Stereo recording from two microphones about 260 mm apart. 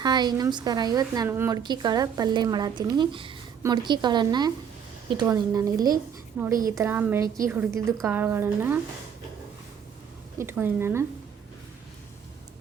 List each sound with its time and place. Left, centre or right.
0.0 s a woman's voice: centre
10.3 s a woman's voice: centre